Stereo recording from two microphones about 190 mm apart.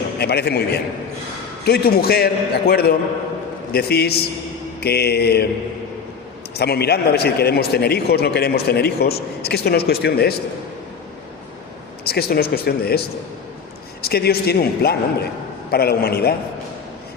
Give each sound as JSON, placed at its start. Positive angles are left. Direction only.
{"t": 0.2, "sound": "a man's voice", "side_deg": 55}
{"t": 6.5, "sound": "a man's voice", "side_deg": 55}
{"t": 12.0, "sound": "a man's voice", "side_deg": 55}
{"t": 14.0, "sound": "a man's voice", "side_deg": 55}